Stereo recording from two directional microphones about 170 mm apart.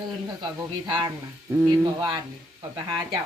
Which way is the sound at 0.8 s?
25° right (ahead or behind).